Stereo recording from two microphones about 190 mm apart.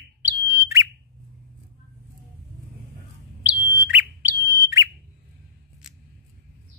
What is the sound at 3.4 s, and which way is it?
Bird, 10° right (ahead or behind).